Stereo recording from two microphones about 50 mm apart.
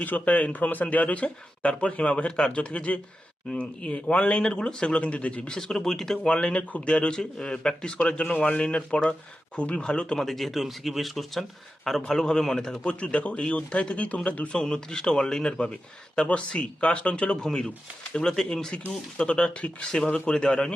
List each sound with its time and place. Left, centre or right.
0.0 s a man's voice: left
5.5 s speech: centre
6.3 s a man's voice: left
8.2 s a man's voice: left
10.2 s a man's voice: centre; by 14.5 s left
14.5 s a man's voice: centre